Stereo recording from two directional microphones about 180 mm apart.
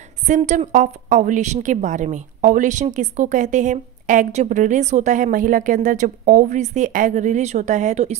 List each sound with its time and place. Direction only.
0.3 s a woman's voice: 40° right (ahead or behind)